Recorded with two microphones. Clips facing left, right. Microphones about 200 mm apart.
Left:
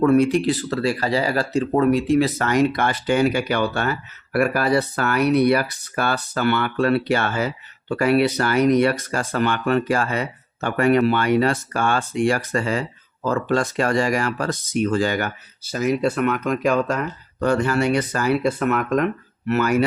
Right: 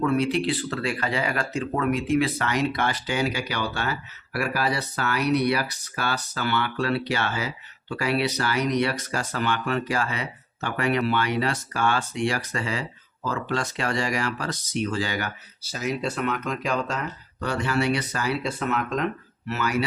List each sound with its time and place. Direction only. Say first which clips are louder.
0.0 s speech: left 7 dB; 50° left (ahead or behind)